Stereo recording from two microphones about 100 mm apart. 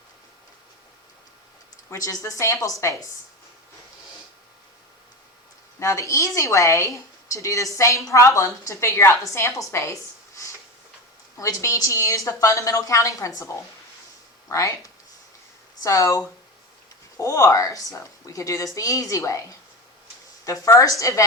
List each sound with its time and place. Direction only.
1.9 s a woman's voice: 35° left (ahead or behind)
5.8 s a woman's voice: 35° left (ahead or behind)
14.5 s a woman's voice: 35° left (ahead or behind)
15.8 s a woman's voice: 35° left (ahead or behind)